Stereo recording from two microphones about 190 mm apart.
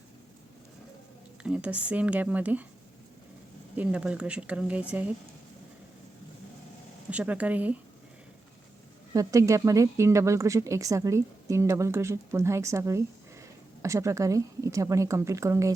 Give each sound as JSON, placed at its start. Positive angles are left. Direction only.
{"t": 1.5, "sound": "speech", "side_deg": -5}
{"t": 3.8, "sound": "speech", "side_deg": -5}
{"t": 7.1, "sound": "speech", "side_deg": -5}
{"t": 9.1, "sound": "speech", "side_deg": -15}